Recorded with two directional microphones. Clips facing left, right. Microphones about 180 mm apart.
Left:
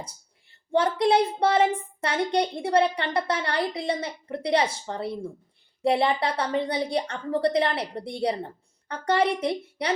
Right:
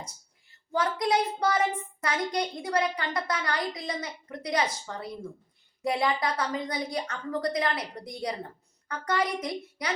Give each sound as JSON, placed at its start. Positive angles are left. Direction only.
{"t": 0.7, "sound": "a woman's voice", "side_deg": 30}